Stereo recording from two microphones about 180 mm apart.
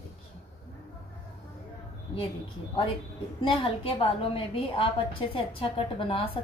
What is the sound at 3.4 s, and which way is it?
A woman's voice, 30° left (ahead or behind).